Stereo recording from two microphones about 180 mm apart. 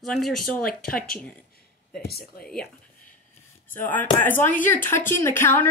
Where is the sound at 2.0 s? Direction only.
55° left (ahead or behind).